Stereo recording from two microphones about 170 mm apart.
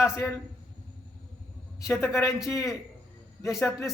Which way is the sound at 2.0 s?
15° left (ahead or behind).